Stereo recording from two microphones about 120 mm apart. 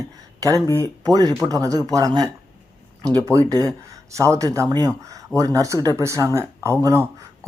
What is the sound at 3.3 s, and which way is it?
Speech, 30° right (ahead or behind).